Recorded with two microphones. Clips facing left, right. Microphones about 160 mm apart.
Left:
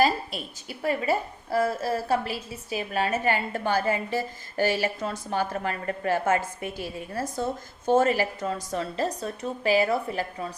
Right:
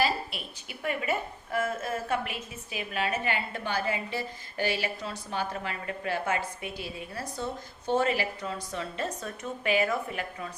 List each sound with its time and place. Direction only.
0.0 s a woman's voice: 40° left (ahead or behind)